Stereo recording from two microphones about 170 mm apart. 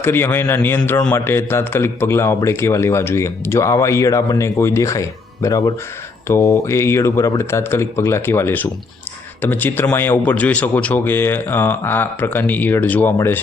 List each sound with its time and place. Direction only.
0.0 s speech: 15° left (ahead or behind)